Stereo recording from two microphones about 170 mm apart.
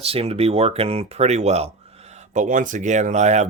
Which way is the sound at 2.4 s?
50° right (ahead or behind).